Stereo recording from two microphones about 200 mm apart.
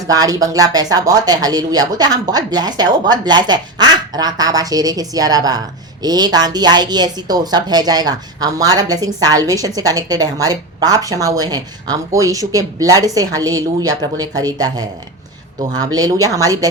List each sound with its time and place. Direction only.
0.0 s a woman's voice: 20° right (ahead or behind)
16.0 s a woman's voice: 15° right (ahead or behind)